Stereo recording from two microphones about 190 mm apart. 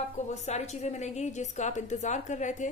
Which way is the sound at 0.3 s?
35° left (ahead or behind).